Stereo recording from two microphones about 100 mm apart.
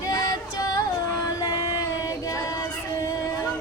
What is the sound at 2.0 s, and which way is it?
Music, 35° left (ahead or behind).